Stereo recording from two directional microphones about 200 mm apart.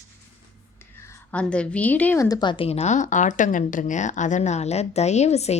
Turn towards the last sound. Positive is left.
turn(degrees=30)  # may be behind; listen again after turning